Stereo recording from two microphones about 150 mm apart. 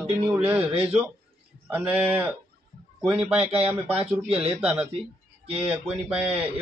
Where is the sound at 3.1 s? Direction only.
10° right (ahead or behind).